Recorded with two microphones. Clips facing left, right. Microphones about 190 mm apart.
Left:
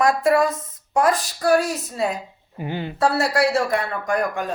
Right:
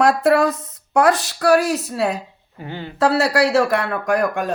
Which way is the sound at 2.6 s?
15° left (ahead or behind).